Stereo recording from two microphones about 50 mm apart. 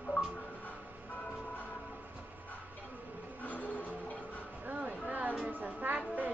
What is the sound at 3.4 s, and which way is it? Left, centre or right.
Music, left.